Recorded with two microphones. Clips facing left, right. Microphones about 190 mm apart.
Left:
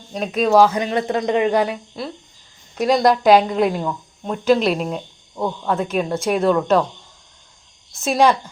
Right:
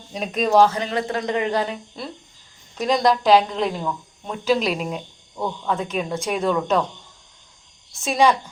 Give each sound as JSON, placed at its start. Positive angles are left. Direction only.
{"t": 0.1, "sound": "speech", "side_deg": 0}
{"t": 8.0, "sound": "speech", "side_deg": 5}